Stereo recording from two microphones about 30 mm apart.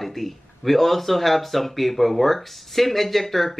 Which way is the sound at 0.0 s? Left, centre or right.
Centre.